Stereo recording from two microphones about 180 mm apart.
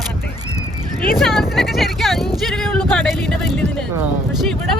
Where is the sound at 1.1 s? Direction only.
Centre (ahead or behind).